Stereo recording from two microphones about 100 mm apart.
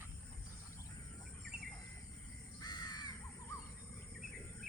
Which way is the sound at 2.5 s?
45° left (ahead or behind).